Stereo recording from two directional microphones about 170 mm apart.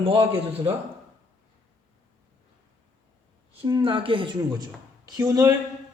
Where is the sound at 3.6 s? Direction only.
30° right (ahead or behind).